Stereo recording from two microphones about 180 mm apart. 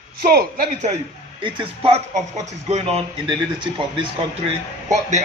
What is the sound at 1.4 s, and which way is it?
Speech, 30° right (ahead or behind).